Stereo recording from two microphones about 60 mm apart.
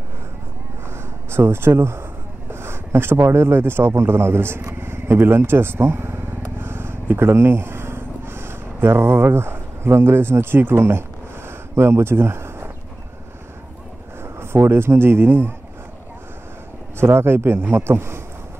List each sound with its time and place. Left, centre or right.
1.3 s a man's voice: right
6.6 s a sound: right
14.2 s speech: right
17.0 s speech: right